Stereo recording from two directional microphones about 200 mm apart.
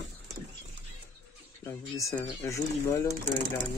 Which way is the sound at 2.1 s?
15° left (ahead or behind).